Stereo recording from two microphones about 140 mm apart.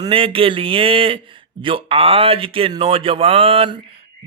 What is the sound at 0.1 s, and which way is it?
Speech, 40° right (ahead or behind).